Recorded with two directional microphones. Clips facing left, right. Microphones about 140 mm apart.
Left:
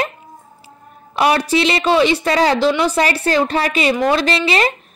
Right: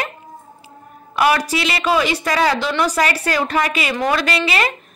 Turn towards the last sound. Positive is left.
turn(degrees=30)  # may be behind; listen again after turning